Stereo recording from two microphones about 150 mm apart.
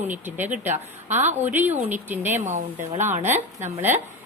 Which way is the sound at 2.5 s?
55° right (ahead or behind).